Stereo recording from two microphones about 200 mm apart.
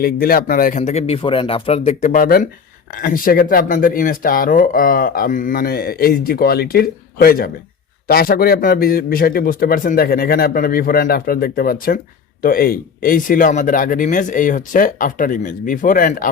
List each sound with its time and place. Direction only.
0.0 s speech: 50° left (ahead or behind)